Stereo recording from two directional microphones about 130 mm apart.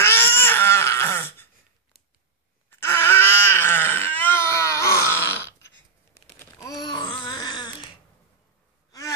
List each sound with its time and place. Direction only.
0.0 s a sound: 15° left (ahead or behind)
2.7 s crying: 20° left (ahead or behind)
6.6 s babbling: 30° left (ahead or behind)